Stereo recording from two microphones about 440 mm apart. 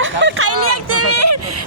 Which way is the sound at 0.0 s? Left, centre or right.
Right.